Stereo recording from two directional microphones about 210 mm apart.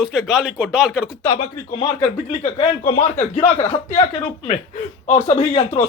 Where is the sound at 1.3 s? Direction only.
20° left (ahead or behind).